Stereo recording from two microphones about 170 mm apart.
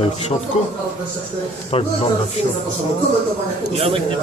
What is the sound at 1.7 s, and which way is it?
Speech, 35° left (ahead or behind).